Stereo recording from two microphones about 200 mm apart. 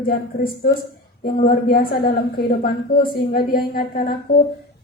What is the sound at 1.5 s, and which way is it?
A woman's voice, 45° left (ahead or behind).